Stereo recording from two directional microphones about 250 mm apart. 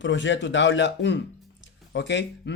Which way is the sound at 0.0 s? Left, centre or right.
Left.